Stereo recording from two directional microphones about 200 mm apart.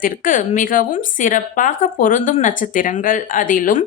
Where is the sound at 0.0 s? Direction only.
40° left (ahead or behind).